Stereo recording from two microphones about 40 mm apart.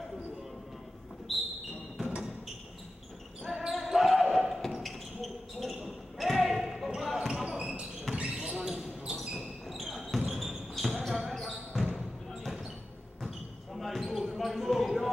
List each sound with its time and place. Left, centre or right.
1.3 s a sound: centre
3.4 s basketball bounce: centre
7.5 s basketball bounce: right
8.6 s basketball bounce: centre
9.7 s basketball bounce: centre
13.7 s basketball bounce: centre